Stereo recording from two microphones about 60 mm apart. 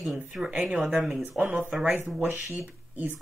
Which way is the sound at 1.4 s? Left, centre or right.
Right.